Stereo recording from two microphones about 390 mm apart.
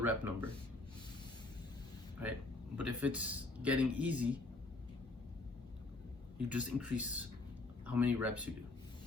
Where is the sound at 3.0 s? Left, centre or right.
Centre.